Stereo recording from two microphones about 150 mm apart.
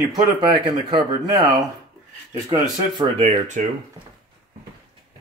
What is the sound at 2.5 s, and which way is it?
Speech, 30° right (ahead or behind).